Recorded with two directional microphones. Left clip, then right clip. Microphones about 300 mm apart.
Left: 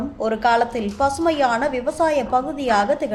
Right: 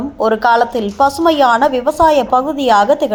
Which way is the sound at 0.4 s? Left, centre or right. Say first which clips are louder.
Right 4 dB; centre.